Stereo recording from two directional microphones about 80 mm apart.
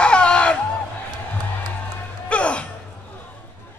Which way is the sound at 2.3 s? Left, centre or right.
Centre.